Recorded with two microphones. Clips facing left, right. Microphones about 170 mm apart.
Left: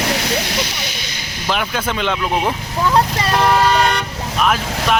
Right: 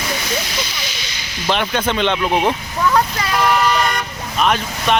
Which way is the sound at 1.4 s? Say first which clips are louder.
Right 2 dB; 5° left (ahead or behind).